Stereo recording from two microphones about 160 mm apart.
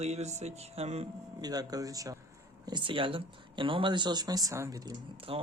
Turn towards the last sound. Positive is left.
turn(degrees=-35)  # may be behind; listen again after turning